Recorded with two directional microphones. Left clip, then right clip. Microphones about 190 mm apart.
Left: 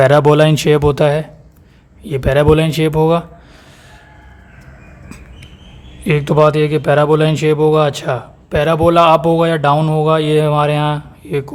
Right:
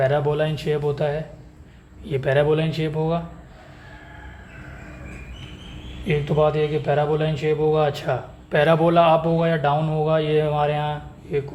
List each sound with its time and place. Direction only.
0.0 s speech: 50° left (ahead or behind)
6.1 s speech: 45° left (ahead or behind)